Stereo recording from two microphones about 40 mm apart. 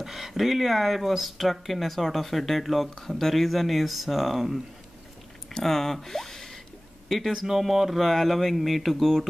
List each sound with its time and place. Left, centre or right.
0.0 s speech: centre
5.5 s a man's voice: centre